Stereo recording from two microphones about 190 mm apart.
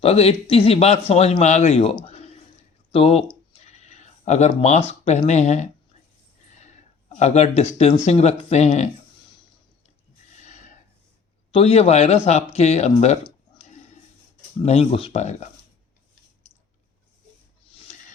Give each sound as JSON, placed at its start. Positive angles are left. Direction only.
{"t": 0.0, "sound": "speech", "side_deg": 30}
{"t": 7.2, "sound": "speech", "side_deg": 35}
{"t": 10.3, "sound": "a sound", "side_deg": 40}
{"t": 11.5, "sound": "speech", "side_deg": 30}
{"t": 13.2, "sound": "a sound", "side_deg": 35}
{"t": 14.6, "sound": "speech", "side_deg": 35}